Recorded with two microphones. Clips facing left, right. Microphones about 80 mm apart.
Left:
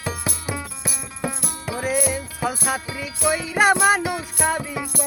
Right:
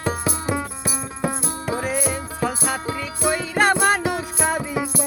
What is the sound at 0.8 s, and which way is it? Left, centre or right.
Music, centre.